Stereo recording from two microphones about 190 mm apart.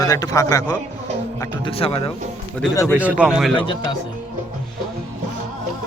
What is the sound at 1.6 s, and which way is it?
Speech, 30° left (ahead or behind).